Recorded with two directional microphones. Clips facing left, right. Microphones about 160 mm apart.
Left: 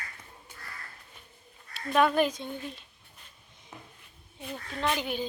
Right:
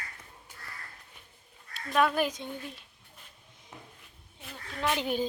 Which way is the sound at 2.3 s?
15° right (ahead or behind).